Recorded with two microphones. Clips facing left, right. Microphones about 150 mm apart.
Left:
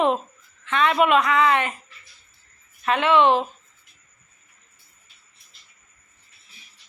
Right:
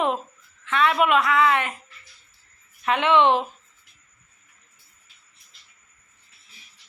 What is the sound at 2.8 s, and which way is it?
Speech, 15° right (ahead or behind).